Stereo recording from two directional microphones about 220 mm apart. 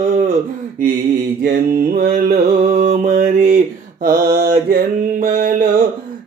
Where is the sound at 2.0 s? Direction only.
40° right (ahead or behind).